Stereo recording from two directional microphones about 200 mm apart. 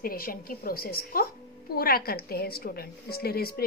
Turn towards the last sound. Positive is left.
turn(degrees=50)  # may be behind; listen again after turning